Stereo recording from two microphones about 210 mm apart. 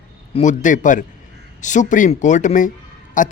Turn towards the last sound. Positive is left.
turn(degrees=40)  # may be behind; listen again after turning